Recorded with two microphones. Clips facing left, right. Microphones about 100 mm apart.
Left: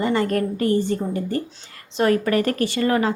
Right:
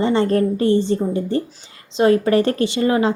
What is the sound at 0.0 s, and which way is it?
A woman's voice, 30° right (ahead or behind).